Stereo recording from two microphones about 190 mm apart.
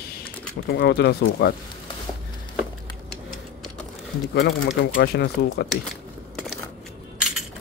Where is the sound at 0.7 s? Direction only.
55° left (ahead or behind).